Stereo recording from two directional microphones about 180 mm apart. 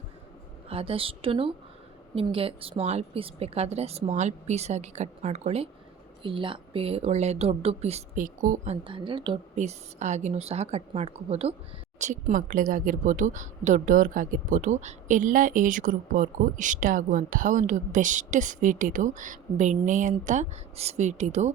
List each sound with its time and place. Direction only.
0.7 s speech: 30° right (ahead or behind)